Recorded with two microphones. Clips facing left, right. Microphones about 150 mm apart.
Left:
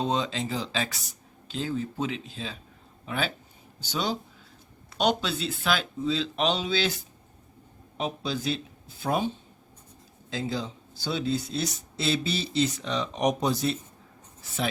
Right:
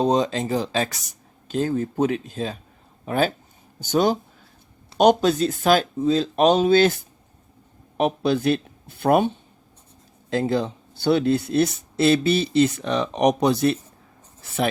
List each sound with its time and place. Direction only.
0.0 s speech: 40° right (ahead or behind)
7.9 s speech: 60° right (ahead or behind)